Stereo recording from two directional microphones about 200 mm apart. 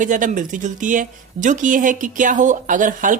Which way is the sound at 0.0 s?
40° right (ahead or behind).